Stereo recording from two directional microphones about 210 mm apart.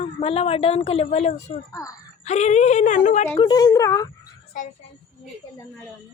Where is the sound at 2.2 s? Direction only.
30° left (ahead or behind).